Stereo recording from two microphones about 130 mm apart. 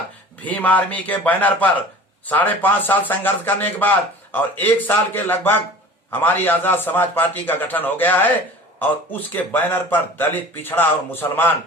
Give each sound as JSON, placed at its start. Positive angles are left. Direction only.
{"t": 0.4, "sound": "a man's voice", "side_deg": 10}